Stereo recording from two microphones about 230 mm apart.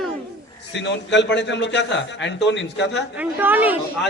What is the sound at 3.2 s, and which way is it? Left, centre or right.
Speech, centre.